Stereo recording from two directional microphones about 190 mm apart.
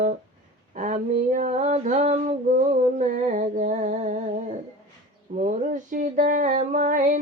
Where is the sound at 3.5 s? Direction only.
40° right (ahead or behind).